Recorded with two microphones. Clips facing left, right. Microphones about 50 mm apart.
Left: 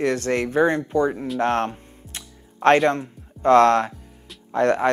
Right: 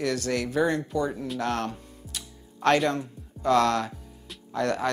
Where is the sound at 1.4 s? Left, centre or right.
Left.